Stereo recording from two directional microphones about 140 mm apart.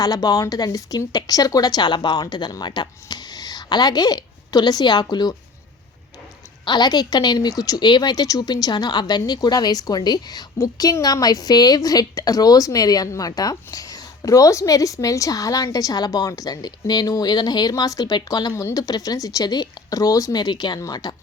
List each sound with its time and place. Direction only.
0.0 s a woman's voice: 25° left (ahead or behind)
6.7 s a woman's voice: 30° left (ahead or behind)